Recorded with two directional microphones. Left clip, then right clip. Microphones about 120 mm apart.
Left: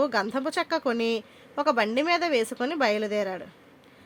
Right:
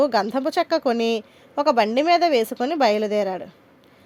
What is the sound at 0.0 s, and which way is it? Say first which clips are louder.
Speech: right 6 dB; 35° right (ahead or behind).